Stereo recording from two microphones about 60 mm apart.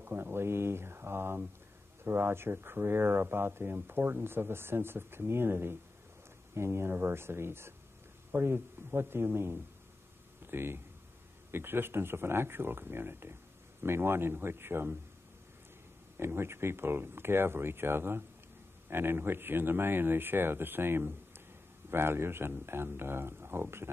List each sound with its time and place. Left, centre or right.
0.0 s speech: right
16.2 s speech: right